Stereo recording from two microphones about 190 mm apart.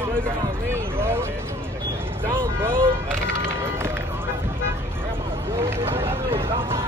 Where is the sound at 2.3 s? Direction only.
10° right (ahead or behind).